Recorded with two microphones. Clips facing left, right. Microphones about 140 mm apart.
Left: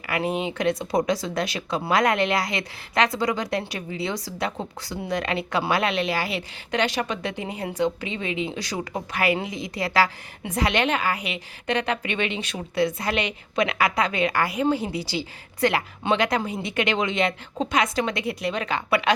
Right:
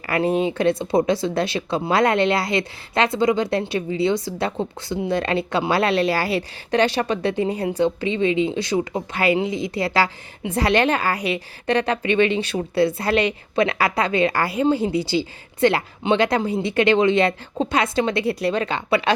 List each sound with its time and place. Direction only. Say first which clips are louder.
0.3 s a woman's voice: right 5 dB; 30° right (ahead or behind)